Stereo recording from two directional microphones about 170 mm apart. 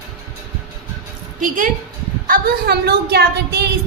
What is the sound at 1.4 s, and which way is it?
Female singing, 50° right (ahead or behind).